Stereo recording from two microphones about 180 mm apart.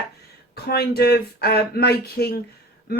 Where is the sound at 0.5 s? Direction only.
60° left (ahead or behind).